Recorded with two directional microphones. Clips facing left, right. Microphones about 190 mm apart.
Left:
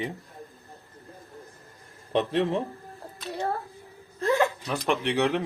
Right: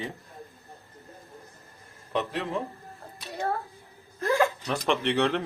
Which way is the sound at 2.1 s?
25° left (ahead or behind).